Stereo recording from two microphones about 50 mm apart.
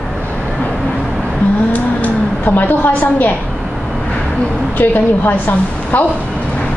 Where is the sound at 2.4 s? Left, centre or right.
Left.